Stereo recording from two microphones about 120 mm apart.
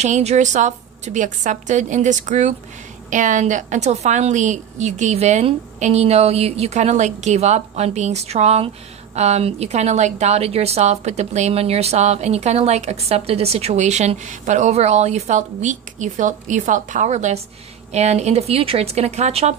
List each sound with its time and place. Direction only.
0.0 s a woman's voice: 65° right (ahead or behind)